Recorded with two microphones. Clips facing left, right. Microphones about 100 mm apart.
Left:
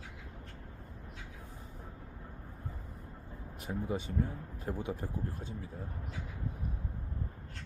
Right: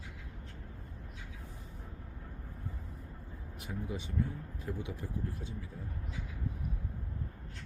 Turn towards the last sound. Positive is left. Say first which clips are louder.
# left 1 dB
turn(degrees=45)  # may be behind; listen again after turning